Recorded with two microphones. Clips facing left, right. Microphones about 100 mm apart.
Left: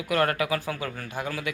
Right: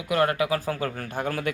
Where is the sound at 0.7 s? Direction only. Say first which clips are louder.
Right 3 dB; 40° right (ahead or behind).